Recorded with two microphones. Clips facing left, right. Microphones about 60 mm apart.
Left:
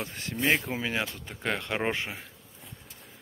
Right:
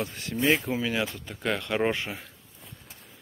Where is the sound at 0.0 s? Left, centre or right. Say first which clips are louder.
Right 3 dB; left.